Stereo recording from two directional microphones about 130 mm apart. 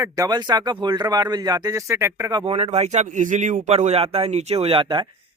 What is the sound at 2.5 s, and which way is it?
A man's voice, 55° right (ahead or behind).